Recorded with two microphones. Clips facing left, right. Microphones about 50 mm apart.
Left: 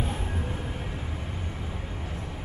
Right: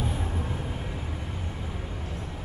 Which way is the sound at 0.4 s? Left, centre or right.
Centre.